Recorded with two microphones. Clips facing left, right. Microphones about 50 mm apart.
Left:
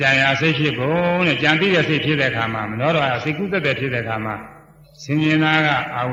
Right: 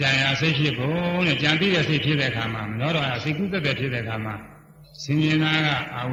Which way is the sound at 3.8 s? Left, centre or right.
Centre.